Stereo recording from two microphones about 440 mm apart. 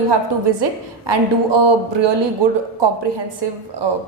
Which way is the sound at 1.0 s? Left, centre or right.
Right.